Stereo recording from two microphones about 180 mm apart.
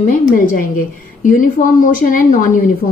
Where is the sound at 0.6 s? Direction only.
50° left (ahead or behind).